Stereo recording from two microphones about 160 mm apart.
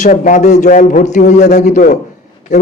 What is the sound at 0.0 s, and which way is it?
A man's voice, 50° left (ahead or behind).